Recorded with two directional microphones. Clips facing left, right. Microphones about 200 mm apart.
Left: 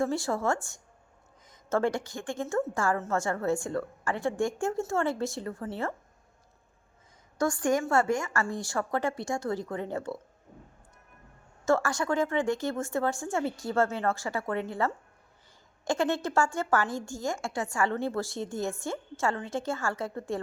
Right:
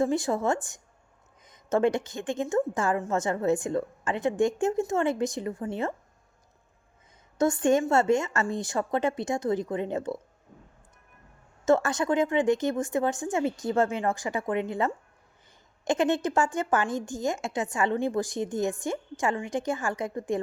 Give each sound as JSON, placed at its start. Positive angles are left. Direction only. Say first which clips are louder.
{"t": 0.0, "sound": "a woman's voice", "louder": "right 3 dB", "side_deg": -20}
{"t": 7.3, "sound": "a woman's voice", "louder": "right 4 dB", "side_deg": -20}
{"t": 11.6, "sound": "a woman's voice", "louder": "right 3 dB", "side_deg": -20}